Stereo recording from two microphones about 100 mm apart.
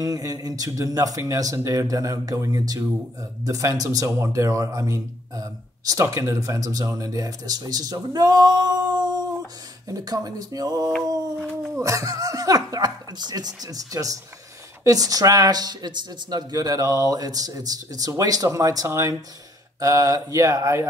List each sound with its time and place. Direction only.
0.0 s speech: 35° right (ahead or behind)